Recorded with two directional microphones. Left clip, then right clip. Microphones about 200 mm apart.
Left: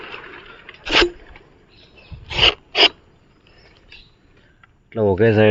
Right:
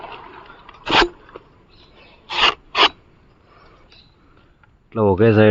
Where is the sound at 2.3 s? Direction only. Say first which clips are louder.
Left 1 dB; 50° right (ahead or behind).